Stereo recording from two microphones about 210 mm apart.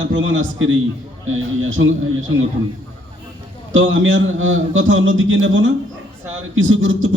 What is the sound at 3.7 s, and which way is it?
A man's voice, 65° right (ahead or behind).